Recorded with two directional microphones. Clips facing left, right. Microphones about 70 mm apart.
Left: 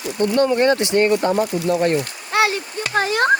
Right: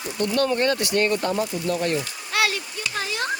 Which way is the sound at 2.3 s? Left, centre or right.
Left.